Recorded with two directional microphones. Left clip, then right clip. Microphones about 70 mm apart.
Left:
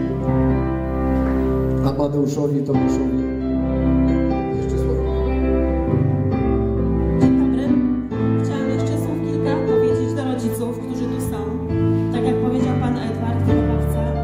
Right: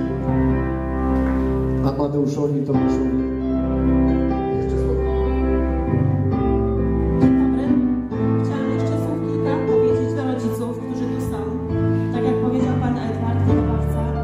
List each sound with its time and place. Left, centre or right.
2.7 s speech: left
7.2 s music: left
9.5 s music: left
12.3 s music: left